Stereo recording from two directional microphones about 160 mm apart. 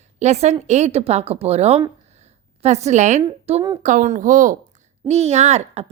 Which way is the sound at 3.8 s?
50° right (ahead or behind).